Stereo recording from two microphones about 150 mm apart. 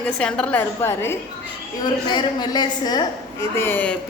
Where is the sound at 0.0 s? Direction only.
5° left (ahead or behind).